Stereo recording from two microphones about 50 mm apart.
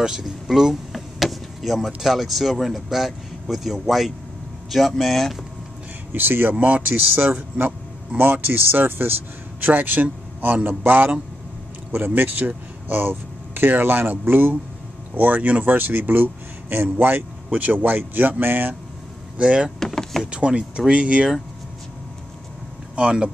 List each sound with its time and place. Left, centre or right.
0.0 s vehicle: centre
2.0 s speech: centre
6.1 s speech: right
19.3 s speech: right
19.8 s vehicle: centre
20.2 s speech: right
22.9 s speech: right